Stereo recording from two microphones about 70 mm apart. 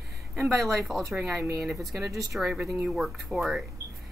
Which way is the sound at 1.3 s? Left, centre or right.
Right.